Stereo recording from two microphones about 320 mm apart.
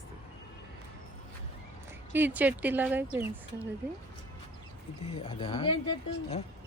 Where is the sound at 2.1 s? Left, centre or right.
Centre.